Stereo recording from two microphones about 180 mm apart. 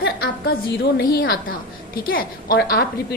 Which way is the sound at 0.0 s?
65° left (ahead or behind).